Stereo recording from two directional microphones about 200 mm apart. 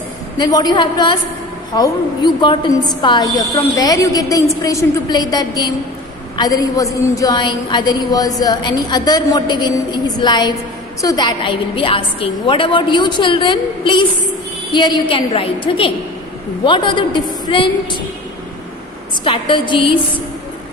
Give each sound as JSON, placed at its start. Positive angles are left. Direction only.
{"t": 0.3, "sound": "a woman's voice", "side_deg": 20}
{"t": 19.2, "sound": "a woman's voice", "side_deg": 25}